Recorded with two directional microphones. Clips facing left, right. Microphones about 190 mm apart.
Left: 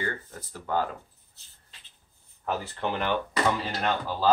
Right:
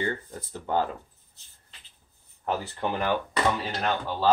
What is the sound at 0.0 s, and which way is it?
Speech, 25° right (ahead or behind).